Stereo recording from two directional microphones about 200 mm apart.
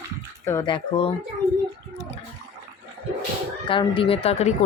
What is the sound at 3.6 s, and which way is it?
Speech, 25° left (ahead or behind).